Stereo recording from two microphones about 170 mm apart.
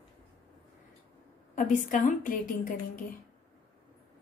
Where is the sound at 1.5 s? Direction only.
50° left (ahead or behind).